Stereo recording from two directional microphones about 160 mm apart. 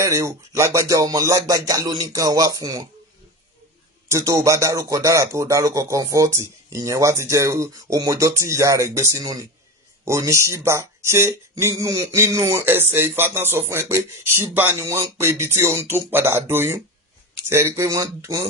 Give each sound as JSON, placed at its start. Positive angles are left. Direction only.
{"t": 0.0, "sound": "speech", "side_deg": -15}
{"t": 4.1, "sound": "speech", "side_deg": -20}